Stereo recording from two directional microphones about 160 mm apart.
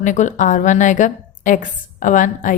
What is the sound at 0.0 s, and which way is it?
A woman's voice, 50° left (ahead or behind).